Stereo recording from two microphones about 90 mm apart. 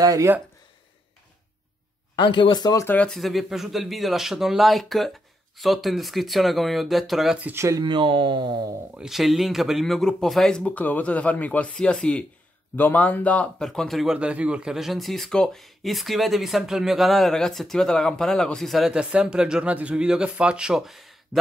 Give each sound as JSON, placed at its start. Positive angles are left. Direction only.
{"t": 0.0, "sound": "speech", "side_deg": -45}
{"t": 2.1, "sound": "speech", "side_deg": 70}
{"t": 3.1, "sound": "speech", "side_deg": 0}
{"t": 7.5, "sound": "speech", "side_deg": -35}
{"t": 7.8, "sound": "speech", "side_deg": -65}
{"t": 8.9, "sound": "speech", "side_deg": -5}
{"t": 13.6, "sound": "speech", "side_deg": 5}
{"t": 14.1, "sound": "speech", "side_deg": -10}